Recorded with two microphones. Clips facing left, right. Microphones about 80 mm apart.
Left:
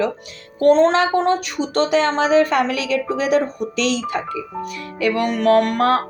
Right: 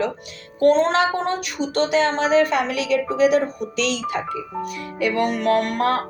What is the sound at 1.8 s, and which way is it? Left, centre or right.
Speech, left.